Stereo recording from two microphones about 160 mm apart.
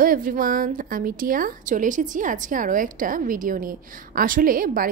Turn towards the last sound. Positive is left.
turn(degrees=-60)  # may be behind; listen again after turning